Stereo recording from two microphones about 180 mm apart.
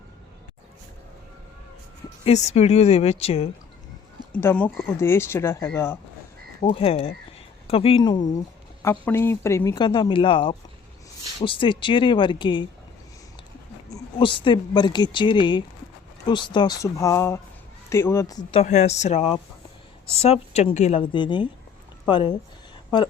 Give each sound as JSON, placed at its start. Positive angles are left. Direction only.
{"t": 2.2, "sound": "speech", "side_deg": 35}
{"t": 4.3, "sound": "speech", "side_deg": 10}
{"t": 6.6, "sound": "speech", "side_deg": 30}
{"t": 13.9, "sound": "speech", "side_deg": 25}
{"t": 18.6, "sound": "speech", "side_deg": 40}
{"t": 21.1, "sound": "speech", "side_deg": 25}